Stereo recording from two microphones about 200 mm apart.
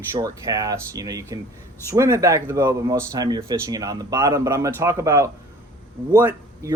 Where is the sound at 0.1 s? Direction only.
15° right (ahead or behind).